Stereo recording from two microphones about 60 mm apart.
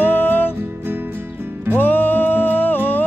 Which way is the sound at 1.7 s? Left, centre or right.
Left.